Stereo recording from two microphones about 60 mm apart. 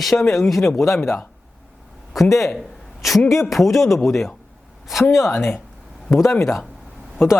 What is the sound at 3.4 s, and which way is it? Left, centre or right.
Speech, centre.